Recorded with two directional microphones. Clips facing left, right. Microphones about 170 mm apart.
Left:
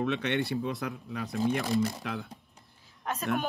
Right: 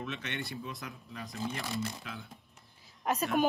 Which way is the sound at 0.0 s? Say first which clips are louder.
Left 10 dB; 60° left (ahead or behind).